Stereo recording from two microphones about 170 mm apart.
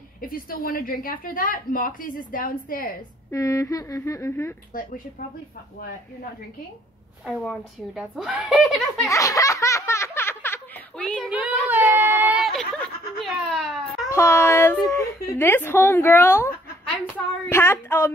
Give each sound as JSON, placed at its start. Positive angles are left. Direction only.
{"t": 0.3, "sound": "a woman's voice", "side_deg": 55}
{"t": 3.3, "sound": "speech", "side_deg": 20}
{"t": 7.2, "sound": "a woman's voice", "side_deg": -5}
{"t": 9.1, "sound": "laughter", "side_deg": 20}
{"t": 11.2, "sound": "a sound", "side_deg": -5}
{"t": 14.0, "sound": "speech", "side_deg": 15}